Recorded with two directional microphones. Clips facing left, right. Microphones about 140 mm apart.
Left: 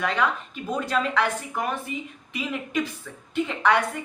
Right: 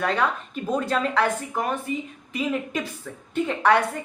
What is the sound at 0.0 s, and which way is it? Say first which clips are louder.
A woman's voice: right 1 dB; 35° right (ahead or behind).